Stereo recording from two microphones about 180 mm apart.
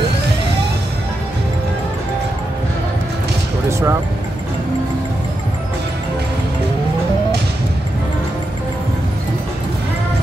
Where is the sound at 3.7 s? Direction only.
15° right (ahead or behind).